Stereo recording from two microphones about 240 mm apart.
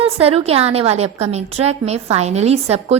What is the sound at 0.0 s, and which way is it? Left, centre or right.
A woman's voice, right.